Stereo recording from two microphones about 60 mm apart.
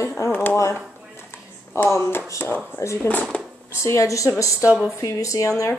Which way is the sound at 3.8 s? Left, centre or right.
Left.